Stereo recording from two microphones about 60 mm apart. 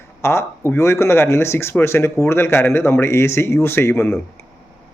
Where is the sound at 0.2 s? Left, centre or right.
Left.